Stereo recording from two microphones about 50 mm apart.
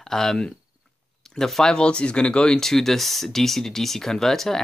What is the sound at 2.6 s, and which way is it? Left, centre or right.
Speech, centre.